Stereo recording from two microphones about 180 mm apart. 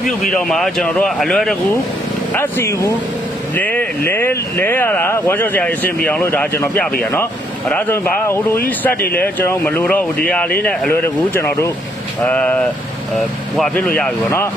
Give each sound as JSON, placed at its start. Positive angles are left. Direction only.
{"t": 0.3, "sound": "a man's voice", "side_deg": 0}
{"t": 2.3, "sound": "speech", "side_deg": 10}
{"t": 8.9, "sound": "speech", "side_deg": 55}
{"t": 9.2, "sound": "speech", "side_deg": 10}